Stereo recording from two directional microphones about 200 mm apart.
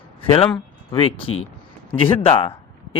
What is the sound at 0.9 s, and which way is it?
Speech, 25° left (ahead or behind).